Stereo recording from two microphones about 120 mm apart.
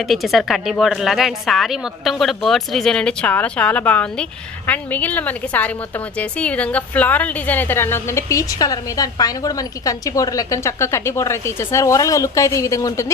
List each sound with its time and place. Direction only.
0.1 s a woman's voice: centre (ahead or behind); by 13.1 s 25° left (ahead or behind)